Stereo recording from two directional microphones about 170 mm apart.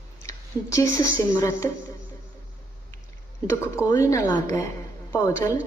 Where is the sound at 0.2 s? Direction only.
20° left (ahead or behind).